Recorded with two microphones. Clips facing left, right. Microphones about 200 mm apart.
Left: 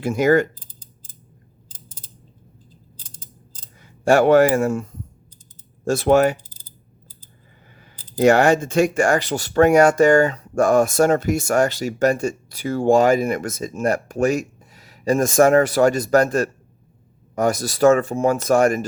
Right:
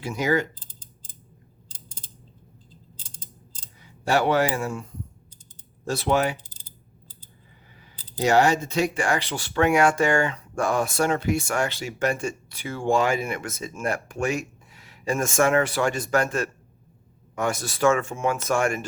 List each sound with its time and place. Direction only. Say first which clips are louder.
0.0 s speech: left 8 dB; 50° left (ahead or behind)
3.8 s speech: left 7 dB; 50° left (ahead or behind)
7.8 s speech: left 9 dB; 55° left (ahead or behind)